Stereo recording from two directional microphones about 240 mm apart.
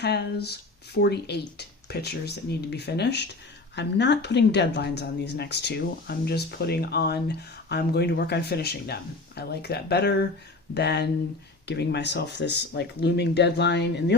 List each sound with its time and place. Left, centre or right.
0.0 s speech: left